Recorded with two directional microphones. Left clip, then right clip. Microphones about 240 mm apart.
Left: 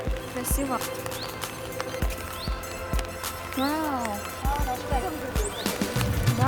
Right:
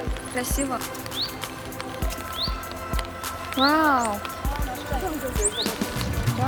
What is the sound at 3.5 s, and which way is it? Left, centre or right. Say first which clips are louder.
Speech: right 8 dB; centre.